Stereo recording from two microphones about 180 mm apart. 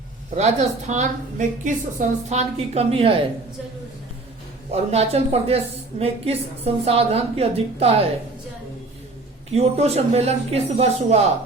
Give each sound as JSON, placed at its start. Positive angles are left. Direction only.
{"t": 0.3, "sound": "a woman's voice", "side_deg": -40}
{"t": 4.7, "sound": "a woman's voice", "side_deg": -35}
{"t": 9.5, "sound": "a woman's voice", "side_deg": -35}